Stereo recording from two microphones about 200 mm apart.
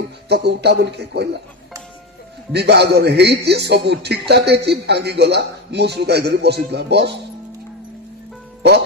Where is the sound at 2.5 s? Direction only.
55° right (ahead or behind).